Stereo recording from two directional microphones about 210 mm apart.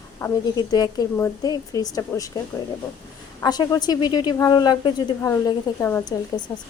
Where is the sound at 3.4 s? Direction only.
20° left (ahead or behind).